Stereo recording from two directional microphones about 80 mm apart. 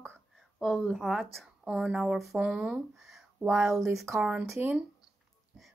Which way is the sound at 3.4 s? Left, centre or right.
Centre.